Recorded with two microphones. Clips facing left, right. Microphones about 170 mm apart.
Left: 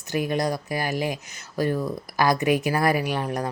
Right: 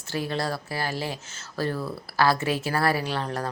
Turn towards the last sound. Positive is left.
turn(degrees=15)  # may be behind; listen again after turning